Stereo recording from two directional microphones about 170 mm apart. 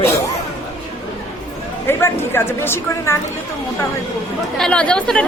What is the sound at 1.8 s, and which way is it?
A woman's voice, 15° left (ahead or behind).